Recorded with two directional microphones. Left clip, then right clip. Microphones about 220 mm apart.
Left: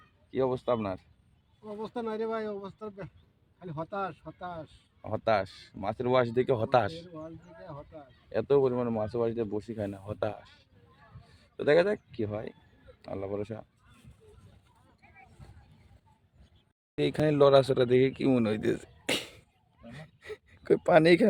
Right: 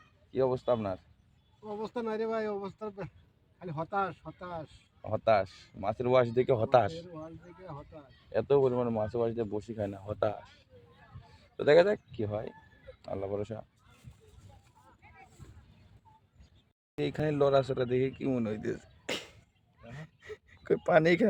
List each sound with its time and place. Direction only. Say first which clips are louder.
0.3 s speech: even; 5° left (ahead or behind)
1.6 s speech: even; 10° right (ahead or behind)
5.0 s speech: right 1 dB; 5° left (ahead or behind)
7.1 s speech: left 1 dB; 5° right (ahead or behind)
17.0 s speech: left 5 dB; 35° left (ahead or behind)
19.0 s cough: left 5 dB; 25° left (ahead or behind)
19.9 s a sound: left 2 dB; 20° left (ahead or behind)